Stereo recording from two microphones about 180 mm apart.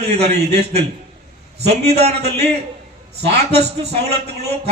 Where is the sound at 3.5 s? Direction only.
35° right (ahead or behind).